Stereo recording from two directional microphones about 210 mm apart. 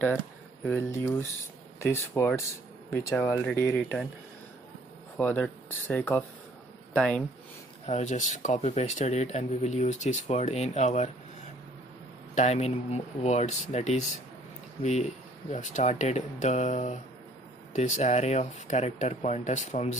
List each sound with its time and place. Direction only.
0.7 s speech: 10° left (ahead or behind)
5.1 s speech: 5° left (ahead or behind)
7.8 s speech: 35° left (ahead or behind)
12.4 s speech: 30° left (ahead or behind)